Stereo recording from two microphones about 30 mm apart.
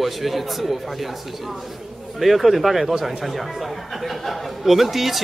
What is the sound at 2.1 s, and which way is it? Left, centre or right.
Speech, centre.